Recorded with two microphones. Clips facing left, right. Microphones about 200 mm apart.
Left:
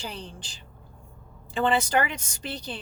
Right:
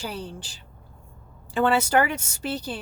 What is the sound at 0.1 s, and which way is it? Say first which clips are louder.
Speech: right 5 dB; 5° right (ahead or behind).